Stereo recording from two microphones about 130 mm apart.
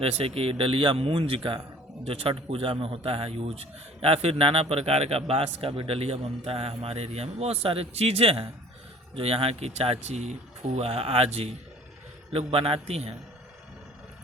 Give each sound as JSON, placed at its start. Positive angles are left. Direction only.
{"t": 0.0, "sound": "a man's voice", "side_deg": -50}